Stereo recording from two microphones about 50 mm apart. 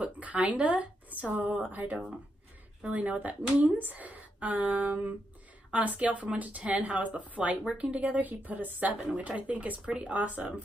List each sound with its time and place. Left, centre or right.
0.0 s speech: right